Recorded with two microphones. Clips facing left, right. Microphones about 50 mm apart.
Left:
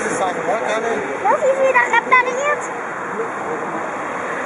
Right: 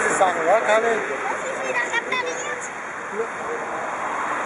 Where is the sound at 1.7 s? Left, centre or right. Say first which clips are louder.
Left 10 dB; left.